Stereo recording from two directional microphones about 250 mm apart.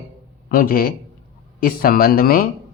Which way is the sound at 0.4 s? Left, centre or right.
Left.